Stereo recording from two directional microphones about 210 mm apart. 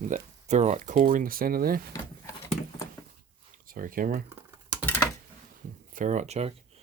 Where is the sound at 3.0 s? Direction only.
15° left (ahead or behind).